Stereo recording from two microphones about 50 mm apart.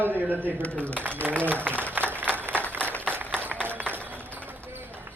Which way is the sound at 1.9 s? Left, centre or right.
Right.